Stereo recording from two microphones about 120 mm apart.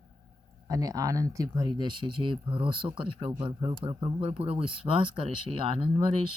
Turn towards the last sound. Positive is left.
turn(degrees=-45)  # may be behind; listen again after turning